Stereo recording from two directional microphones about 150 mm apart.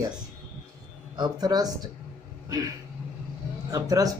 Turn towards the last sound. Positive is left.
turn(degrees=-25)  # may be behind; listen again after turning